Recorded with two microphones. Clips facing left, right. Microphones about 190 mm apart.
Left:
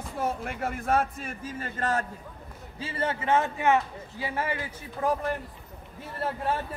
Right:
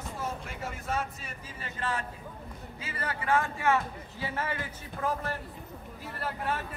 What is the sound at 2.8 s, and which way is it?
A man's voice, 25° left (ahead or behind).